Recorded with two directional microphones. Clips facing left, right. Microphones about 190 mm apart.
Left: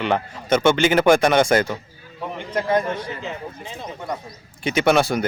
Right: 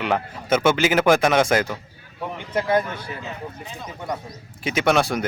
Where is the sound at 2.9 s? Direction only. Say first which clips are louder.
Left 5 dB; 25° left (ahead or behind).